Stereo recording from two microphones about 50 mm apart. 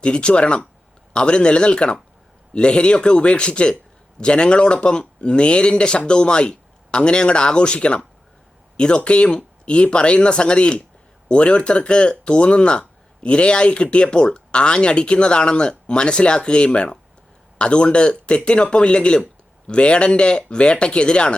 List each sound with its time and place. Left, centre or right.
0.0 s speech: centre